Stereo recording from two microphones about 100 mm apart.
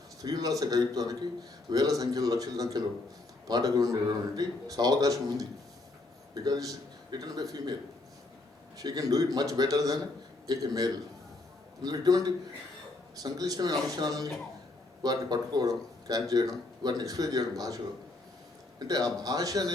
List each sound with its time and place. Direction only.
0.2 s a man's voice: 40° right (ahead or behind)
8.8 s a man's voice: 40° right (ahead or behind)
18.8 s a man's voice: 40° right (ahead or behind)